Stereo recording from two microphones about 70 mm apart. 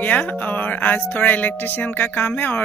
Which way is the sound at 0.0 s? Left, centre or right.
Left.